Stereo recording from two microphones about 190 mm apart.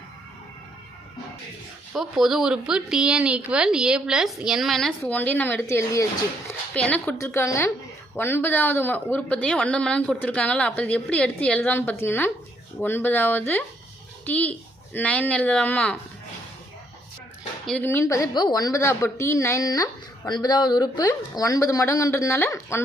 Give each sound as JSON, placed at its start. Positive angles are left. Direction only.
{"t": 1.9, "sound": "a woman's voice", "side_deg": 0}
{"t": 17.7, "sound": "a woman's voice", "side_deg": 10}